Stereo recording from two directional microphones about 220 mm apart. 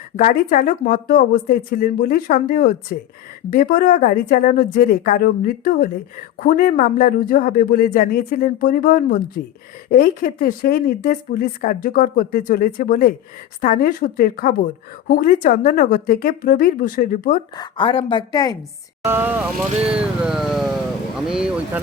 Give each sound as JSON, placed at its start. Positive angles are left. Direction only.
{"t": 0.2, "sound": "speech", "side_deg": 35}
{"t": 17.6, "sound": "a woman's voice", "side_deg": 25}
{"t": 19.0, "sound": "speech", "side_deg": -10}
{"t": 19.9, "sound": "vehicle", "side_deg": -5}